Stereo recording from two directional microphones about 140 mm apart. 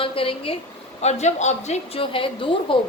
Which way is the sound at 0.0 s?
40° left (ahead or behind).